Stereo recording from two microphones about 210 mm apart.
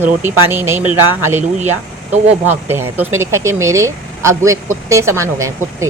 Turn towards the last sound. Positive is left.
turn(degrees=-15)  # may be behind; listen again after turning